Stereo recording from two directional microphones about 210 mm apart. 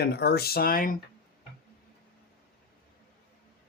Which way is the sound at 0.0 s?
50° left (ahead or behind).